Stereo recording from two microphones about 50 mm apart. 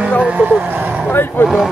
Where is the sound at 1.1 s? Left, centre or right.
Left.